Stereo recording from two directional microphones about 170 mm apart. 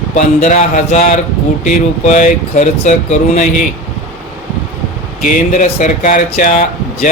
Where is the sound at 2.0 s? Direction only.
45° left (ahead or behind).